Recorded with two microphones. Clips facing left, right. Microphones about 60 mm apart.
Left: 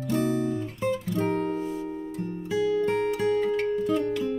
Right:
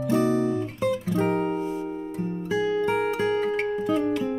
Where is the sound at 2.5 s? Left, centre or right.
Right.